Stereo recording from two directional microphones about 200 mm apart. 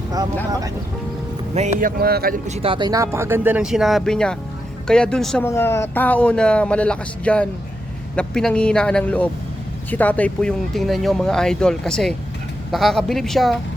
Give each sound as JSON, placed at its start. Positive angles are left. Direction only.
{"t": 1.5, "sound": "speech", "side_deg": -40}
{"t": 2.5, "sound": "speech", "side_deg": -30}